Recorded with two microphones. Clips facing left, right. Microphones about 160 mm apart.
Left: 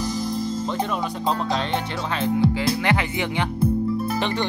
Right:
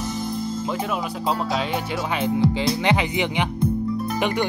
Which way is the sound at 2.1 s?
20° right (ahead or behind).